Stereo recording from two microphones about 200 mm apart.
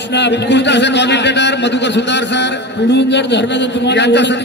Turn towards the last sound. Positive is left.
turn(degrees=60)  # may be behind; listen again after turning